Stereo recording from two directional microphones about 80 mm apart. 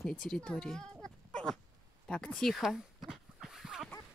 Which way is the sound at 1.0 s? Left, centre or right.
Centre.